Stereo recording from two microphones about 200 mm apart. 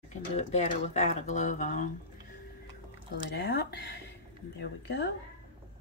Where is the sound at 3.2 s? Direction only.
55° left (ahead or behind).